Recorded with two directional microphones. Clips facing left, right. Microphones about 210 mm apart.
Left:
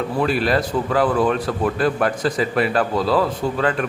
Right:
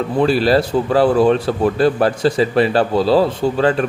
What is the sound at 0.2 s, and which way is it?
A man's voice, 30° right (ahead or behind).